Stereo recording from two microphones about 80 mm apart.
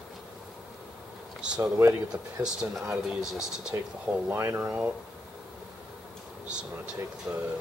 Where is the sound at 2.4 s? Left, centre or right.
Centre.